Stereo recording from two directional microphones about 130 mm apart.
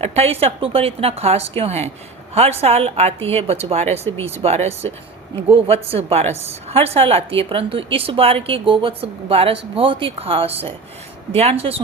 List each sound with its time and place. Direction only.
0.0 s a woman's voice: 50° right (ahead or behind)